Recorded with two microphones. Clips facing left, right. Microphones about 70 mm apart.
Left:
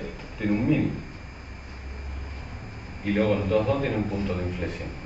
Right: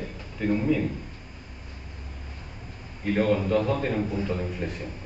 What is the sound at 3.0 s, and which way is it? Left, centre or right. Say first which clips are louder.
A man's voice: even; centre.